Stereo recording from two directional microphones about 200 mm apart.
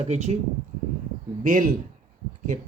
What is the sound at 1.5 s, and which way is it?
Speech, 40° right (ahead or behind).